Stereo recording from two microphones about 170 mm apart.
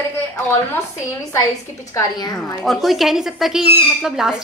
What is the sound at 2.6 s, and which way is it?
A woman's voice, centre (ahead or behind).